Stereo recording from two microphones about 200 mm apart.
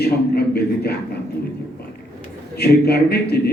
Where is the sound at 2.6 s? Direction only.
55° left (ahead or behind).